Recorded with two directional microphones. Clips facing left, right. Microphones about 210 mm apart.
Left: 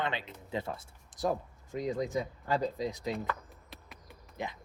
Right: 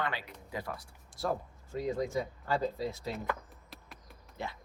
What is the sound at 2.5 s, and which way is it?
Speech, 15° left (ahead or behind).